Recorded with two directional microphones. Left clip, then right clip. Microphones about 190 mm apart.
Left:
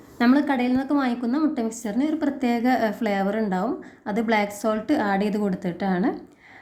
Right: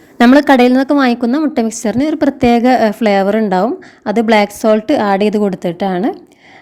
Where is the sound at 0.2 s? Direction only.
55° right (ahead or behind).